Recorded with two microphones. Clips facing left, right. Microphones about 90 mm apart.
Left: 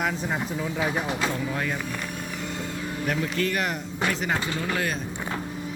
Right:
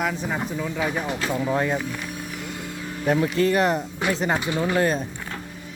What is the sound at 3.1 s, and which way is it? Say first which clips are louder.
Speech: right 7 dB; 30° right (ahead or behind).